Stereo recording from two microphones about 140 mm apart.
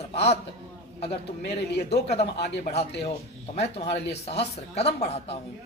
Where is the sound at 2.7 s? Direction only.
50° left (ahead or behind).